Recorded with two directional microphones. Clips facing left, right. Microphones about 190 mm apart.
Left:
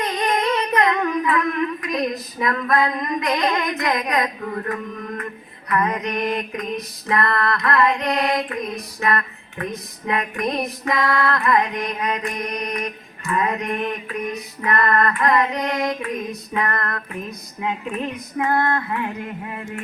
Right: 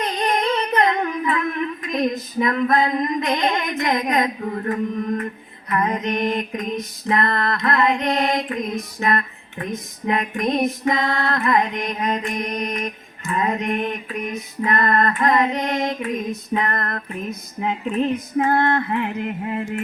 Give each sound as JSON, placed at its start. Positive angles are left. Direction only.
{"t": 0.0, "sound": "humming", "side_deg": -30}
{"t": 1.9, "sound": "female singing", "side_deg": -25}
{"t": 9.0, "sound": "a sound", "side_deg": -20}
{"t": 10.1, "sound": "female singing", "side_deg": -20}